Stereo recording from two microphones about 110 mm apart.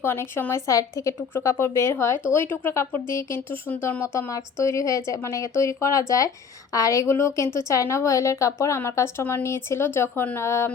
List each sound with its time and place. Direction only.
0.0 s speech: 20° left (ahead or behind)